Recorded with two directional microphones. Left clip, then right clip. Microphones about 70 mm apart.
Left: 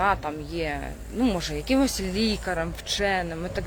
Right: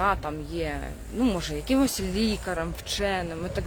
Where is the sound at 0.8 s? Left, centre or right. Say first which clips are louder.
Left 1 dB; right.